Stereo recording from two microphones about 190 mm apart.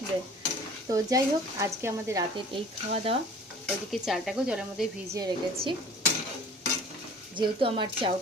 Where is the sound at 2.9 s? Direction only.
30° right (ahead or behind).